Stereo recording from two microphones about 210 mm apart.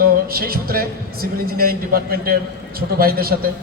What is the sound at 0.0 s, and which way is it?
A man's voice, 45° right (ahead or behind).